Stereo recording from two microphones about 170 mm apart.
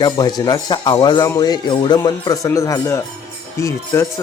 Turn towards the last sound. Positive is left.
turn(degrees=20)  # may be behind; listen again after turning